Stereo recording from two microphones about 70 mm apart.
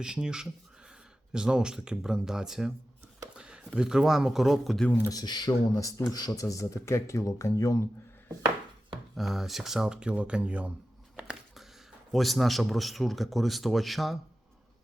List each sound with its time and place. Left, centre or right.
0.0 s speech: centre
5.0 s speech: left
9.1 s speech: centre
11.2 s a sound: centre
12.1 s a man's voice: centre